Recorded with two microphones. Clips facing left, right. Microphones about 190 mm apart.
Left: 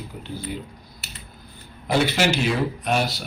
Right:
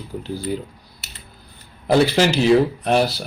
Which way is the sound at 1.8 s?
35° right (ahead or behind).